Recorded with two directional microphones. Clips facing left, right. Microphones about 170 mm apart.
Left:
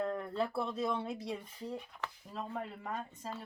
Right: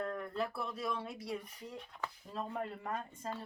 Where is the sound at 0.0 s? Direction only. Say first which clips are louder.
Left 3 dB; 30° left (ahead or behind).